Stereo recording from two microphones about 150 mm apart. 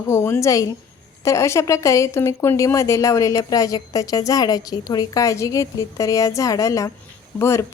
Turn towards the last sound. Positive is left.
turn(degrees=20)  # may be behind; listen again after turning